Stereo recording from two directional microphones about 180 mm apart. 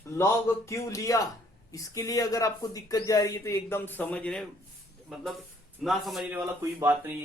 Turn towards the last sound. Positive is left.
turn(degrees=-15)  # may be behind; listen again after turning